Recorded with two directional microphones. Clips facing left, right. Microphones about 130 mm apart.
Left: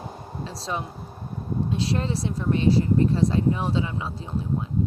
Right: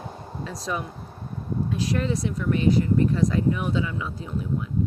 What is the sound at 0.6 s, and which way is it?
Speech, 30° left (ahead or behind).